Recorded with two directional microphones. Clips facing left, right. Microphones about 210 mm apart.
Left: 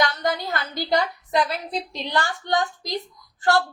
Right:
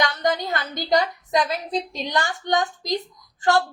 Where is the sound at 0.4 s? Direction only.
20° right (ahead or behind).